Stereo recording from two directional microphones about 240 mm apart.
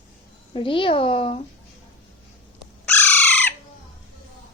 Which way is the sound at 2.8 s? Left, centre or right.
Centre.